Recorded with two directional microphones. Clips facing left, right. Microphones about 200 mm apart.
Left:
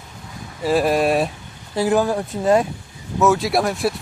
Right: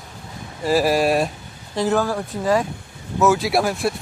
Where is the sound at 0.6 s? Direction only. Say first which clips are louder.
Even; centre (ahead or behind).